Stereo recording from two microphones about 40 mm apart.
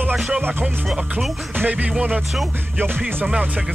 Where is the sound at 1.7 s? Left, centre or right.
Right.